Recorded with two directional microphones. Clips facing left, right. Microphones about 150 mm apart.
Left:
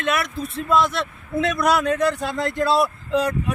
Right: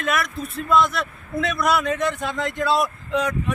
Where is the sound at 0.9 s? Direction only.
30° left (ahead or behind).